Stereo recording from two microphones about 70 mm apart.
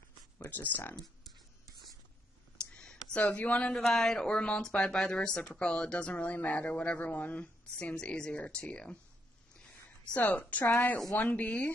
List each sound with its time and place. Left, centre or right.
0.5 s a woman's voice: left
0.9 s a sound: centre
2.7 s speech: centre
3.8 s speech: centre
10.1 s a woman's voice: left